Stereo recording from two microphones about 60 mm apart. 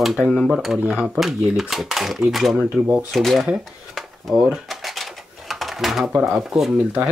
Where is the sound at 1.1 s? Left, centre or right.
Centre.